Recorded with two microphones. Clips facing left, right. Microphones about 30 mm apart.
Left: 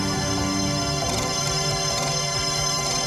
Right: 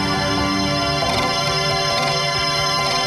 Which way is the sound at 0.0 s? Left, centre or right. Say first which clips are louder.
Right 6 dB; right.